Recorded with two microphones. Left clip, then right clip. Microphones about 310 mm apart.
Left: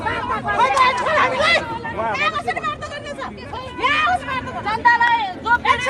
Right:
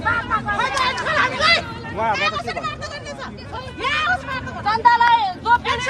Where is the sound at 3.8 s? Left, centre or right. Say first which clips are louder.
Left 3 dB; left.